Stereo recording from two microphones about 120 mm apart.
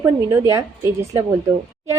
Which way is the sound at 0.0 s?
25° right (ahead or behind).